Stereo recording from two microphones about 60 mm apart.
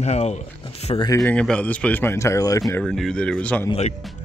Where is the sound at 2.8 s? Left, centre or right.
Centre.